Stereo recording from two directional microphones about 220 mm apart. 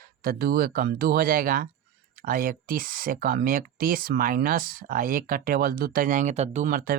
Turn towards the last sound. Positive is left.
turn(degrees=-40)  # may be behind; listen again after turning